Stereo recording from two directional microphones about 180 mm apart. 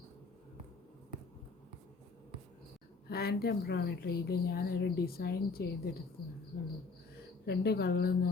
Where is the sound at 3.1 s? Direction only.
60° left (ahead or behind).